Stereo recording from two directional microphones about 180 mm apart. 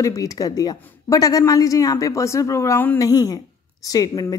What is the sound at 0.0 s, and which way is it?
Speech, 20° left (ahead or behind).